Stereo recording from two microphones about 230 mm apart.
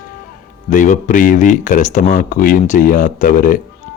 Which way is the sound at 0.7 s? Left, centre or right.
Left.